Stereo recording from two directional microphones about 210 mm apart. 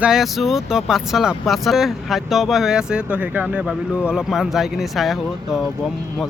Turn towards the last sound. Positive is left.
turn(degrees=0)  # may be behind; listen again after turning